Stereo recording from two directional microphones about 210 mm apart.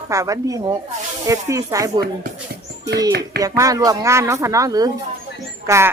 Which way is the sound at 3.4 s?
15° right (ahead or behind).